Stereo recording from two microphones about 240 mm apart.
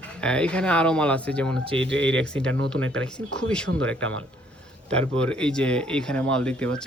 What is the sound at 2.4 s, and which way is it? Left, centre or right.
Speech, right.